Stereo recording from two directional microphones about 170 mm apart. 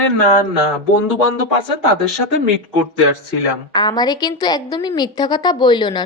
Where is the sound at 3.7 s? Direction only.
25° left (ahead or behind).